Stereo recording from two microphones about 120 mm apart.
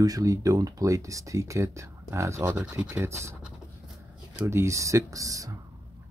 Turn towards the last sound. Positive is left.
turn(degrees=-30)  # may be behind; listen again after turning